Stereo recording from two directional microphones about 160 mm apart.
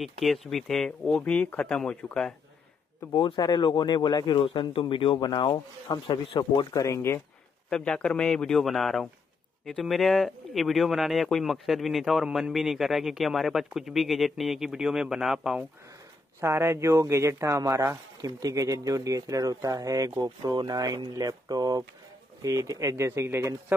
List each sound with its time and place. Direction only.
0.0 s speech: centre (ahead or behind)
3.0 s speech: 30° left (ahead or behind)
7.7 s speech: 5° left (ahead or behind)
16.3 s speech: 15° right (ahead or behind)